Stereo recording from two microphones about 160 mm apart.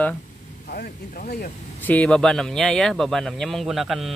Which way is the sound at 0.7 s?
65° left (ahead or behind).